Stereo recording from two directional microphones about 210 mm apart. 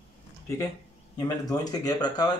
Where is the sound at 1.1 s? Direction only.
15° left (ahead or behind).